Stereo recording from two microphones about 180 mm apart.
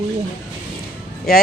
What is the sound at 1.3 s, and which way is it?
Speech, 55° left (ahead or behind).